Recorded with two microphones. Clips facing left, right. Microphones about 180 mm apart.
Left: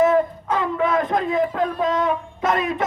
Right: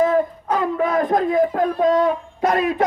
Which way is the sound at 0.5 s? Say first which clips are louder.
Right 1 dB; 45° right (ahead or behind).